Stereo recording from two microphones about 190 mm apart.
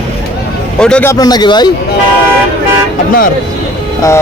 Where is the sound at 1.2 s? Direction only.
20° left (ahead or behind).